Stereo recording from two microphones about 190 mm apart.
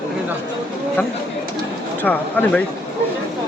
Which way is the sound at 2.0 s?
10° left (ahead or behind).